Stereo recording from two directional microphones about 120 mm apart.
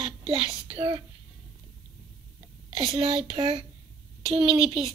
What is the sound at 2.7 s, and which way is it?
Speech, 45° right (ahead or behind).